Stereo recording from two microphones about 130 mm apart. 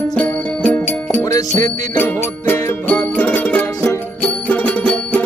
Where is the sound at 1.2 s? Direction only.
30° left (ahead or behind).